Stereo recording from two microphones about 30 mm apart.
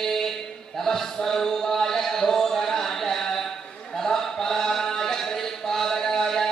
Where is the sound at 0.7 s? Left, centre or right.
Centre.